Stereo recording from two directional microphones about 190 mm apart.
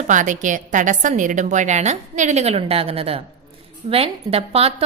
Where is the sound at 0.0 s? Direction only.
40° right (ahead or behind).